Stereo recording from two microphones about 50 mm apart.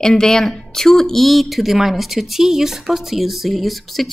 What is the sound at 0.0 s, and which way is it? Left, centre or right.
Speech, centre.